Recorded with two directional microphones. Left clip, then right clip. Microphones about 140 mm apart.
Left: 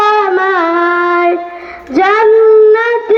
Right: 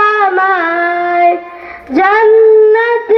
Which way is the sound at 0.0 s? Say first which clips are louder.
Even; 50° left (ahead or behind).